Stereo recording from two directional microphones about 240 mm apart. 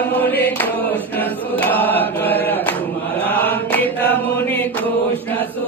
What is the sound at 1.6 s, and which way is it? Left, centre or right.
Mantra, centre.